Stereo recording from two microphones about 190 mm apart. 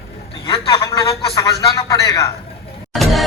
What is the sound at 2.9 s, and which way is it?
Music, centre (ahead or behind).